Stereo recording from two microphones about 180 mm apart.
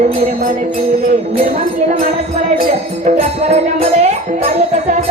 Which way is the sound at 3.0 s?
40° right (ahead or behind).